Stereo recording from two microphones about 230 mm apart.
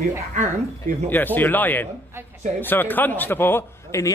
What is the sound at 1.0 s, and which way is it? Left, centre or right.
A man's voice, centre.